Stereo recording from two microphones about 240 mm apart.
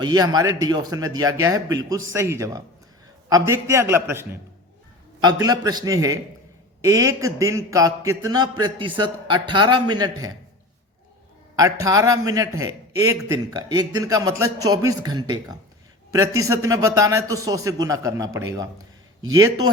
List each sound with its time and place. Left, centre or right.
0.0 s a man's voice: centre
11.5 s a man's voice: centre